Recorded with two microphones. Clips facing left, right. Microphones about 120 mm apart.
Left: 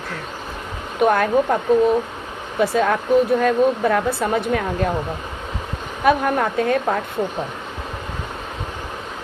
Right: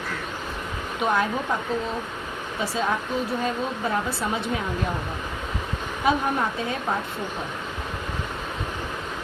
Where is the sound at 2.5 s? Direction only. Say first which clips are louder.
Left 8 dB; 60° left (ahead or behind).